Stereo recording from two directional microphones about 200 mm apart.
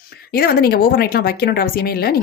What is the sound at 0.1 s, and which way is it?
Speech, 50° left (ahead or behind).